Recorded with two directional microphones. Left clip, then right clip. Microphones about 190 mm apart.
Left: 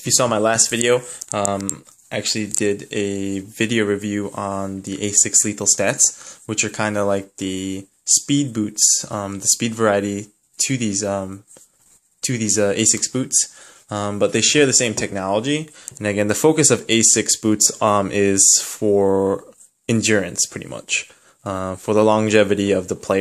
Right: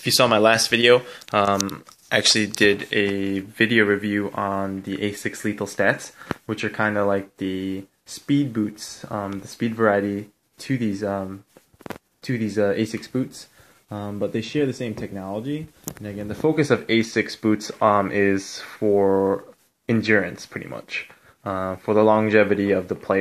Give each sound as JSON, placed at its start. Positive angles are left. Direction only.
{"t": 0.0, "sound": "speech", "side_deg": 5}
{"t": 15.3, "sound": "speech", "side_deg": 50}
{"t": 16.0, "sound": "speech", "side_deg": 20}